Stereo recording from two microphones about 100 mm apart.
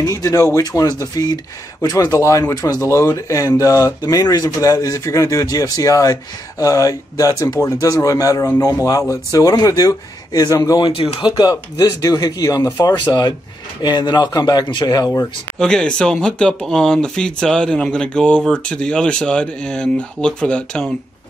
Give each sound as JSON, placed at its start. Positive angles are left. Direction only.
{"t": 0.0, "sound": "speech", "side_deg": 35}
{"t": 10.9, "sound": "speech", "side_deg": 70}
{"t": 11.2, "sound": "speech", "side_deg": 40}
{"t": 13.0, "sound": "a man's voice", "side_deg": 50}
{"t": 15.6, "sound": "speech", "side_deg": 5}